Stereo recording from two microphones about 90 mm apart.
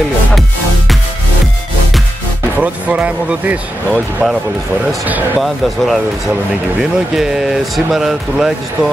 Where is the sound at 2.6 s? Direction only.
15° right (ahead or behind).